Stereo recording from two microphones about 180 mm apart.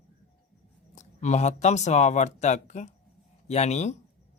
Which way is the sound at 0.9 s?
40° left (ahead or behind).